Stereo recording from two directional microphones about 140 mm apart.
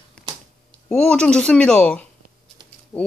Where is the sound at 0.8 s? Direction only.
5° left (ahead or behind).